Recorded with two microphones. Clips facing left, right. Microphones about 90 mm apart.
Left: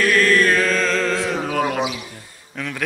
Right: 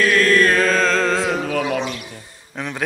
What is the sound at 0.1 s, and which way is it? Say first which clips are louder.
Mantra: right 1 dB; 35° right (ahead or behind).